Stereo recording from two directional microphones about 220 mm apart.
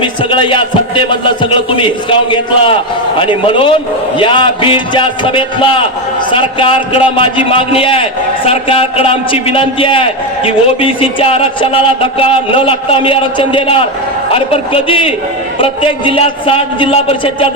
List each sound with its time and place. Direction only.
0.0 s a man's voice: 20° left (ahead or behind)